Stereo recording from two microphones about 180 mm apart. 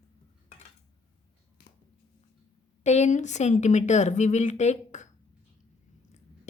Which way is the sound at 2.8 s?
40° left (ahead or behind).